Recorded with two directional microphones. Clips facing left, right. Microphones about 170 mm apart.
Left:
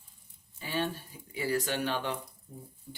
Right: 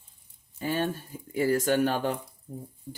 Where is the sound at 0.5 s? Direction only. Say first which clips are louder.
Right 5 dB; 45° right (ahead or behind).